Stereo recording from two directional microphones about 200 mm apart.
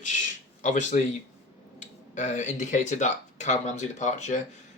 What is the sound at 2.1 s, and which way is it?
Speech, 40° left (ahead or behind).